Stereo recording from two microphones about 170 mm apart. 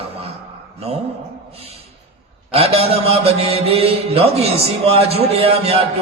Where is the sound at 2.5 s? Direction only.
35° right (ahead or behind).